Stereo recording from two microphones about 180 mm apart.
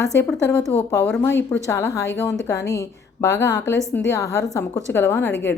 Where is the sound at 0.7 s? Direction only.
15° left (ahead or behind).